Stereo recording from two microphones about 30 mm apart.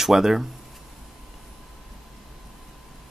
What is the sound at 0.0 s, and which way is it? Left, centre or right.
Speech, centre.